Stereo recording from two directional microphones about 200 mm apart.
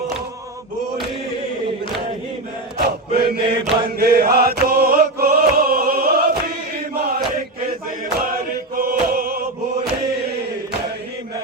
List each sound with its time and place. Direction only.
2.7 s chant: 50° right (ahead or behind)
8.7 s chant: 45° right (ahead or behind)